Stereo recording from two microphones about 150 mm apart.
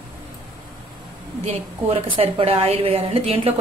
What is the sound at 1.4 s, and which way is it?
A woman's voice, 40° right (ahead or behind).